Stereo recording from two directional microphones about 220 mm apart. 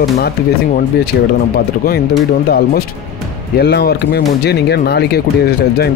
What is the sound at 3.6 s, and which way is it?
Speech, 45° left (ahead or behind).